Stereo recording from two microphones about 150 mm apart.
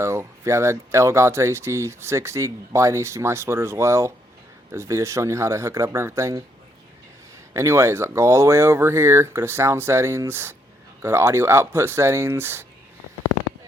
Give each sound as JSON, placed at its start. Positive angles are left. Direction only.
{"t": 0.0, "sound": "speech", "side_deg": -20}
{"t": 7.5, "sound": "speech", "side_deg": -20}